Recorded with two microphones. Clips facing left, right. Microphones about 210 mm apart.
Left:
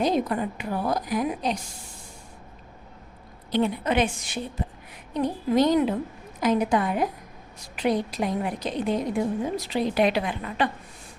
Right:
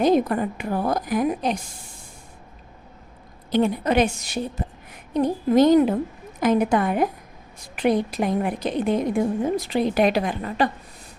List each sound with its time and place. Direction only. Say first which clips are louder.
0.0 s a woman's voice: right 5 dB; 50° right (ahead or behind)
3.5 s a woman's voice: right 4 dB; 45° right (ahead or behind)